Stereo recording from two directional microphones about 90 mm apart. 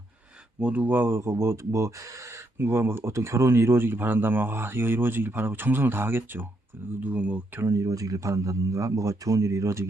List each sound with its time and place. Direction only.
0.6 s speech: 15° right (ahead or behind)
7.6 s speech: 35° right (ahead or behind)